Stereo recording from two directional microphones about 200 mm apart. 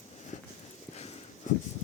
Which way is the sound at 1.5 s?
40° left (ahead or behind).